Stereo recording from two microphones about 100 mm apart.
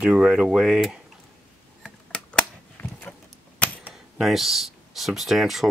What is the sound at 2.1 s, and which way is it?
Typewriter, 10° left (ahead or behind).